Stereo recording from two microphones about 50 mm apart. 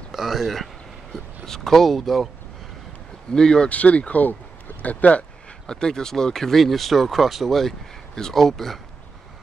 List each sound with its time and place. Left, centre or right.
0.1 s a sound: centre
1.1 s speech: centre
3.3 s speech: centre
3.6 s speech: left
5.7 s speech: centre